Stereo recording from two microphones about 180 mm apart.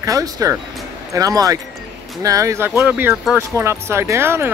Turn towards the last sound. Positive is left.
turn(degrees=-15)  # may be behind; listen again after turning